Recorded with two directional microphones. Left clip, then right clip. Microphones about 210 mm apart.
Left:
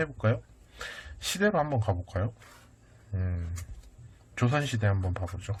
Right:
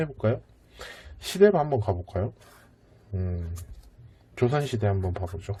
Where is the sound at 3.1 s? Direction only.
15° right (ahead or behind).